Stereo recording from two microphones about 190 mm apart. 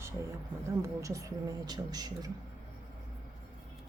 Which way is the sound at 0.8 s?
15° right (ahead or behind).